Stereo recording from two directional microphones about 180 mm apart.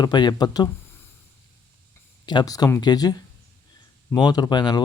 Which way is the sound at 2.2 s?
25° left (ahead or behind).